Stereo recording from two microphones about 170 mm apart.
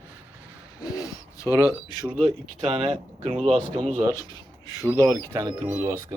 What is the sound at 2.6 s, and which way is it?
Speech, 35° right (ahead or behind).